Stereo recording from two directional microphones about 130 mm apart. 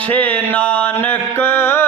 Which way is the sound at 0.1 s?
10° left (ahead or behind).